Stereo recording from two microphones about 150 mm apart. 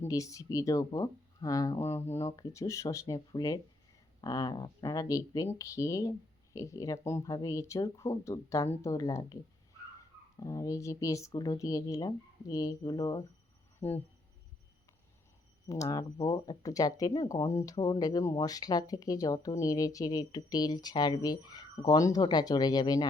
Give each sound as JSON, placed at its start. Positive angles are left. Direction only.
{"t": 0.0, "sound": "speech", "side_deg": 20}
{"t": 10.4, "sound": "speech", "side_deg": 25}
{"t": 13.7, "sound": "speech", "side_deg": 15}
{"t": 15.6, "sound": "speech", "side_deg": 20}